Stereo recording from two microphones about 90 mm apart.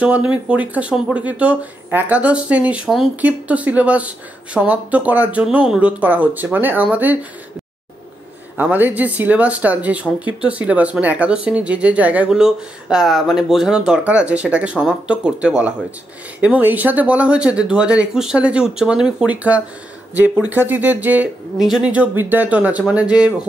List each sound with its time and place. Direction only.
0.0 s speech: 15° right (ahead or behind)
8.5 s speech: 20° right (ahead or behind)
21.5 s speech: 5° right (ahead or behind)
21.9 s speech: 20° right (ahead or behind)